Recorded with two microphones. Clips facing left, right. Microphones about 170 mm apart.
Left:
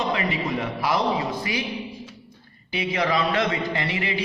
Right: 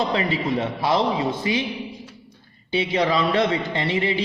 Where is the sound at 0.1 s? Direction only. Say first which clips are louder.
Right 3 dB; 30° right (ahead or behind).